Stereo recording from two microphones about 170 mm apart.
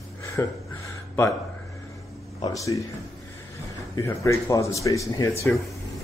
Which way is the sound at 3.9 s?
15° left (ahead or behind).